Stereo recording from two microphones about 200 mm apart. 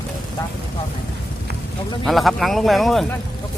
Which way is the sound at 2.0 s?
Centre (ahead or behind).